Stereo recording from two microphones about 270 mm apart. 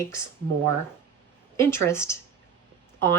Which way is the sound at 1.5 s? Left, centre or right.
Centre.